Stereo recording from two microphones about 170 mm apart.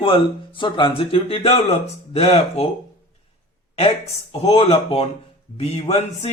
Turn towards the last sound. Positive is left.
turn(degrees=35)  # may be behind; listen again after turning